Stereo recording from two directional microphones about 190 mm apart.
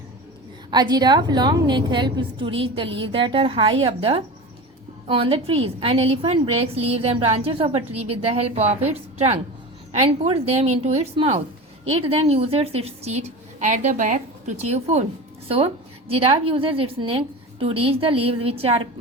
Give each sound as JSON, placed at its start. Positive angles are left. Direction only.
{"t": 0.7, "sound": "a woman's voice", "side_deg": -20}